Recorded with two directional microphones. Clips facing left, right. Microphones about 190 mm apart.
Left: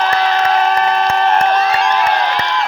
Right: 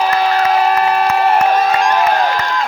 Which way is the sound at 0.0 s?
10° right (ahead or behind).